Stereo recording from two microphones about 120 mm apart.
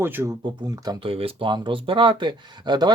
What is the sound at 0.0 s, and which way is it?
Speech, 20° right (ahead or behind).